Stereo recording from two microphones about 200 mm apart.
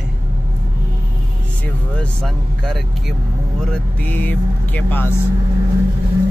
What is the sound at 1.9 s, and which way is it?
Speech, centre (ahead or behind).